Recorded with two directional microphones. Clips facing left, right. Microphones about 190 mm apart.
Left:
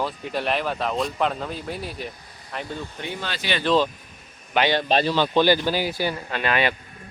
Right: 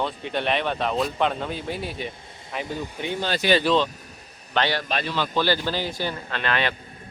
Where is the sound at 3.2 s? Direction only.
35° right (ahead or behind).